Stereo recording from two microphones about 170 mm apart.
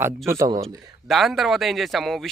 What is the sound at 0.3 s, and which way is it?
Speech, 20° right (ahead or behind).